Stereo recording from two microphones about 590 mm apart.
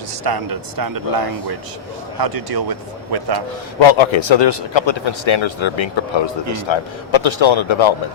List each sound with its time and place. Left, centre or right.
0.3 s a man's voice: right
3.8 s a man's voice: left